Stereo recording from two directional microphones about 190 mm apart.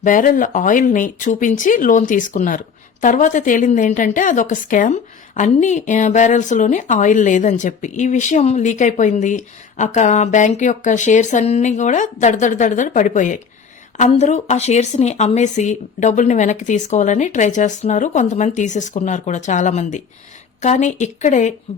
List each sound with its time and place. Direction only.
0.0 s a woman's voice: 45° left (ahead or behind)